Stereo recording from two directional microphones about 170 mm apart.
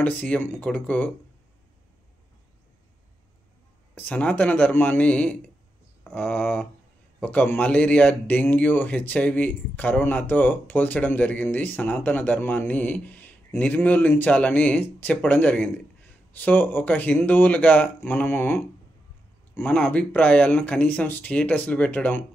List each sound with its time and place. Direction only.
0.0 s a man's voice: 10° left (ahead or behind)
3.9 s a man's voice: 10° left (ahead or behind)